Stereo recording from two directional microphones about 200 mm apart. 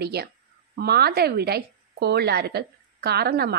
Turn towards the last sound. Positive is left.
turn(degrees=-55)  # may be behind; listen again after turning